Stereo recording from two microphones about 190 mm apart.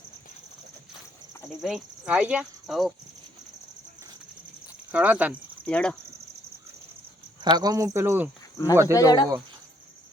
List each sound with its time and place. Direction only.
1.5 s speech: centre (ahead or behind)
4.9 s speech: 5° right (ahead or behind)
5.6 s speech: 5° left (ahead or behind)
7.5 s speech: 20° right (ahead or behind)
9.0 s speech: 20° left (ahead or behind)